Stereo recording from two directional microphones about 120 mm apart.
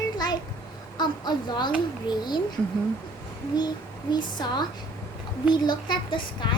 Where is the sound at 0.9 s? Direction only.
35° left (ahead or behind).